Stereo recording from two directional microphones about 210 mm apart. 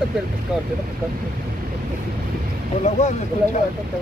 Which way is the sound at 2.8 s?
35° left (ahead or behind).